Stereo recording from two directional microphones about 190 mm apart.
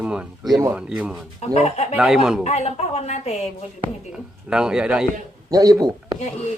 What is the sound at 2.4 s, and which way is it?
A woman's voice, 35° left (ahead or behind).